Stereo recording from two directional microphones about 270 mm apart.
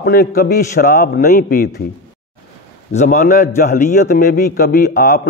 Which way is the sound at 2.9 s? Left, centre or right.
Left.